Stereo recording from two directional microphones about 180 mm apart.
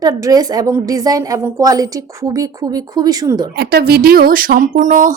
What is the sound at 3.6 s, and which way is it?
Speech, 60° right (ahead or behind).